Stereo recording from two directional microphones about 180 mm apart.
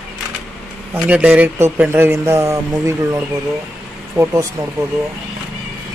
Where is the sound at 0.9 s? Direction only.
5° right (ahead or behind).